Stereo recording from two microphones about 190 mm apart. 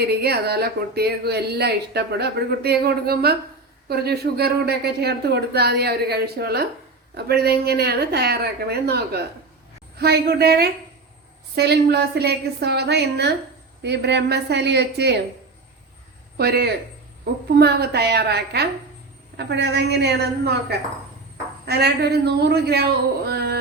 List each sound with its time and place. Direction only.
0.1 s speech: 55° right (ahead or behind)
16.4 s speech: 55° right (ahead or behind)